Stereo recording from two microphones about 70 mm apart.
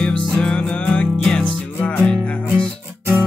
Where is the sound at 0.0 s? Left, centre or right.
Centre.